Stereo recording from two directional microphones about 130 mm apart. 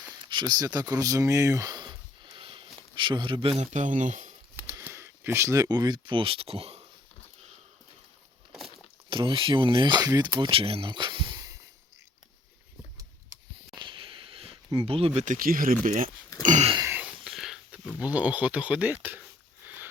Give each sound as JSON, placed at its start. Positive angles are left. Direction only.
{"t": 0.3, "sound": "a sound", "side_deg": -35}
{"t": 2.9, "sound": "speech", "side_deg": -40}
{"t": 3.6, "sound": "speech", "side_deg": -65}
{"t": 4.6, "sound": "speech", "side_deg": -15}
{"t": 9.0, "sound": "speech", "side_deg": -40}
{"t": 10.5, "sound": "a sound", "side_deg": -45}
{"t": 13.7, "sound": "a sound", "side_deg": -40}
{"t": 15.2, "sound": "speech", "side_deg": -85}
{"t": 17.2, "sound": "dog", "side_deg": -5}
{"t": 18.0, "sound": "speech", "side_deg": -10}
{"t": 19.6, "sound": "sniff", "side_deg": -15}